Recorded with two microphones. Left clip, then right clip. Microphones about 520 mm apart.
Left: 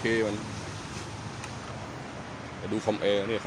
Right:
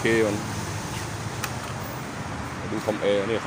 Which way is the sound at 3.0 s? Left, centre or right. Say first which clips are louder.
Right 5 dB; left.